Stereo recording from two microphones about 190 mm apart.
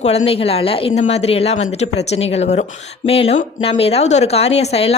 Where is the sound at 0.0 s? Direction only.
35° left (ahead or behind).